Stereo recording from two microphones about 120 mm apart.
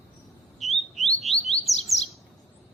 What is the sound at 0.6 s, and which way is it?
Bird, centre (ahead or behind).